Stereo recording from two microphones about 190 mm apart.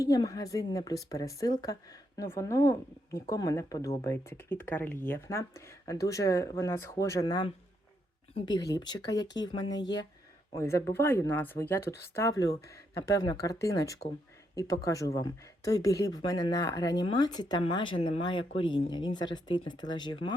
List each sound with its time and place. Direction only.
0.0 s a woman's voice: 20° left (ahead or behind)